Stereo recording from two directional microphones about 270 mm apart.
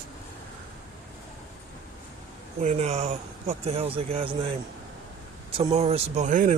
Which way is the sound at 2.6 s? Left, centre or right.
Right.